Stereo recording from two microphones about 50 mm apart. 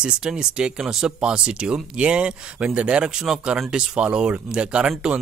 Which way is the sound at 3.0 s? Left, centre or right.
Centre.